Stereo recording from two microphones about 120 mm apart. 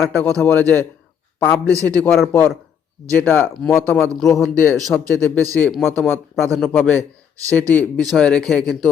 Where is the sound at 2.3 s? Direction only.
15° left (ahead or behind).